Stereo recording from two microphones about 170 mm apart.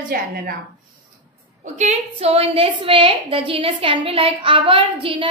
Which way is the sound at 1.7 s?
40° right (ahead or behind).